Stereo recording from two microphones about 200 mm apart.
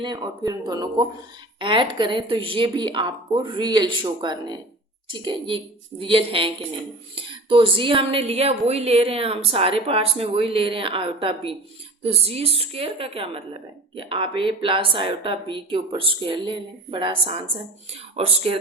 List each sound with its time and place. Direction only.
0.0 s a woman's voice: 20° right (ahead or behind)